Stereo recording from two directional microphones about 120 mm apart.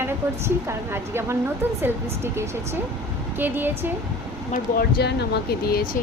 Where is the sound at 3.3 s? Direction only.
15° right (ahead or behind).